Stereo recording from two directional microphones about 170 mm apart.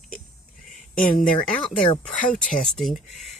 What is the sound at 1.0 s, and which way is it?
Speech, 50° left (ahead or behind).